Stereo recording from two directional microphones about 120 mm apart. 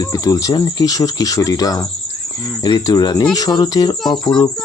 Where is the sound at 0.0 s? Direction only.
30° left (ahead or behind).